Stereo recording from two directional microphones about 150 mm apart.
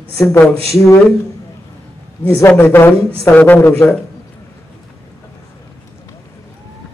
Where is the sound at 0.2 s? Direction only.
15° left (ahead or behind).